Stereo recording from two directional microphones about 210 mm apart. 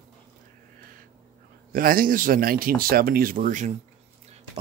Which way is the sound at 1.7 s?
40° right (ahead or behind).